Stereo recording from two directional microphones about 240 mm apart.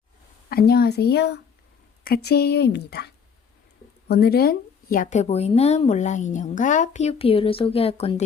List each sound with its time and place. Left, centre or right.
0.5 s speech: left
4.1 s a woman's voice: left